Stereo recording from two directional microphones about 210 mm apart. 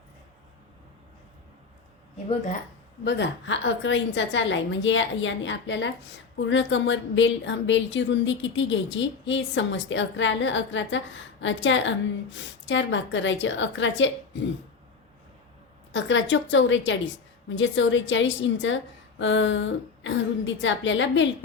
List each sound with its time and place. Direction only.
3.0 s speech: 55° left (ahead or behind)
15.9 s speech: 60° left (ahead or behind)